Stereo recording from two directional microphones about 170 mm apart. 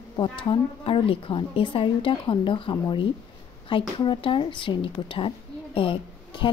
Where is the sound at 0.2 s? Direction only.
30° left (ahead or behind).